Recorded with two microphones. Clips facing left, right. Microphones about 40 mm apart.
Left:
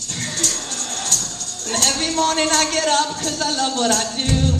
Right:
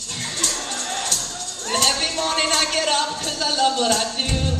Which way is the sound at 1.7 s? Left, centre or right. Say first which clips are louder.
Even; right.